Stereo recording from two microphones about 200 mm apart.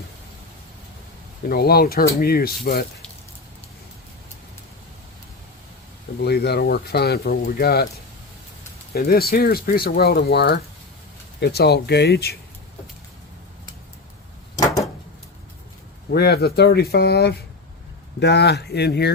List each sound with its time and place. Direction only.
1.5 s speech: 50° left (ahead or behind)
6.1 s speech: 55° left (ahead or behind)
8.9 s speech: 50° left (ahead or behind)
16.1 s speech: 50° left (ahead or behind)